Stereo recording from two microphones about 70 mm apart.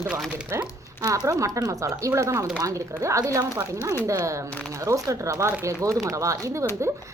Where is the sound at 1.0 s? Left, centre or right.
Right.